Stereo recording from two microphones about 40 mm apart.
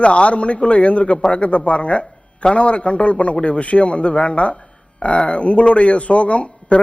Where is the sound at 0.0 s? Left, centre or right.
Left.